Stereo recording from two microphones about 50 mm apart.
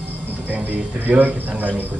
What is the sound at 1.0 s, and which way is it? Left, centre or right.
Speech, right.